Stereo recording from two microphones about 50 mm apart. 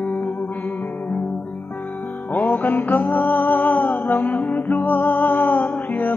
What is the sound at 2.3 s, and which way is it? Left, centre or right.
Music, left.